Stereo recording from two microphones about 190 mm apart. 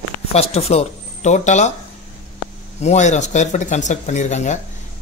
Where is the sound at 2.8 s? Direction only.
40° left (ahead or behind).